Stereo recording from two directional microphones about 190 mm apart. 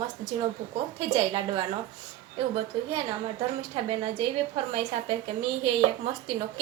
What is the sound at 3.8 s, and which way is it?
A woman's voice, 30° right (ahead or behind).